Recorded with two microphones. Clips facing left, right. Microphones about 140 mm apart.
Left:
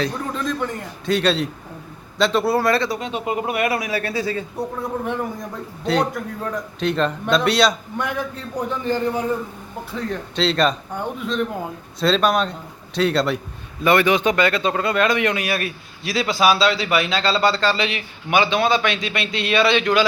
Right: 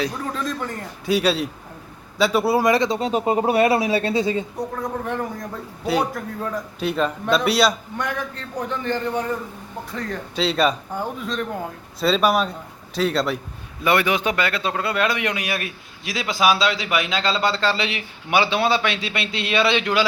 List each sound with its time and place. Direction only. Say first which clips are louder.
0.0 s a man's voice: left 1 dB; 5° right (ahead or behind)
3.0 s speech: right 4 dB; 35° right (ahead or behind); by 4.4 s 20° right (ahead or behind)
4.5 s a man's voice: left 1 dB; 5° left (ahead or behind); by 20.1 s 20° right (ahead or behind)